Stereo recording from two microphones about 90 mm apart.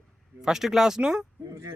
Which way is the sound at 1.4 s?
40° right (ahead or behind).